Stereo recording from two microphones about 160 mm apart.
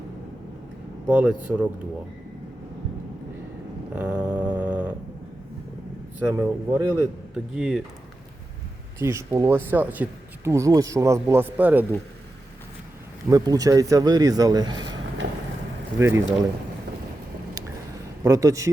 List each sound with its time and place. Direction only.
1.0 s speech: 10° right (ahead or behind)
3.9 s a sound: 10° right (ahead or behind)
6.1 s speech: 15° right (ahead or behind)
7.3 s speech: 5° right (ahead or behind)
9.0 s speech: 20° right (ahead or behind)
13.3 s speech: 20° right (ahead or behind)
16.0 s speech: 15° right (ahead or behind)
18.2 s speech: 20° right (ahead or behind)